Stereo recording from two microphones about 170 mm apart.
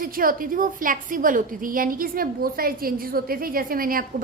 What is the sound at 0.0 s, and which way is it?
A woman's voice, 55° right (ahead or behind).